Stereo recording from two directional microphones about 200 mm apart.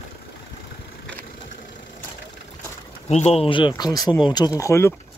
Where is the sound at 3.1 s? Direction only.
30° left (ahead or behind).